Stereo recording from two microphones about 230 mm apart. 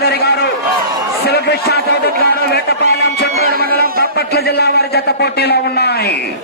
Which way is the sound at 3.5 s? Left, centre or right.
Right.